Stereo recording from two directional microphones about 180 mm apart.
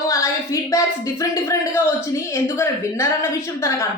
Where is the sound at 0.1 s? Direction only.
15° left (ahead or behind).